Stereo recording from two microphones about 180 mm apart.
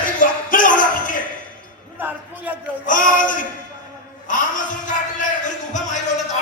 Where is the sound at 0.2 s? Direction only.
50° left (ahead or behind).